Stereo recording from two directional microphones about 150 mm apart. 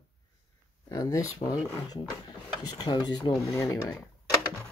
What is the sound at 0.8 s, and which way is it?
Speech, 20° left (ahead or behind).